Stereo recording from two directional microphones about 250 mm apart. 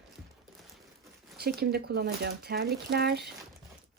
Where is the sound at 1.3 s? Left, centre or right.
Right.